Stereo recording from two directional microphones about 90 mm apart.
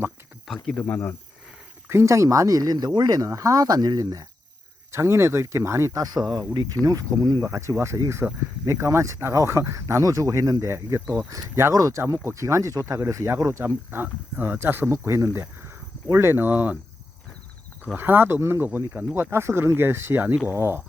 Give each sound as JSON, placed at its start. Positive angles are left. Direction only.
{"t": 0.4, "sound": "speech", "side_deg": 0}
{"t": 1.9, "sound": "speech", "side_deg": -30}
{"t": 4.9, "sound": "speech", "side_deg": -30}
{"t": 7.4, "sound": "speech", "side_deg": -35}
{"t": 13.9, "sound": "speech", "side_deg": -25}
{"t": 17.9, "sound": "speech", "side_deg": -20}